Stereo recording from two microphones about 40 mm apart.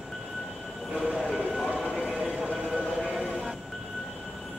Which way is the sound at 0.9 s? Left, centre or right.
Centre.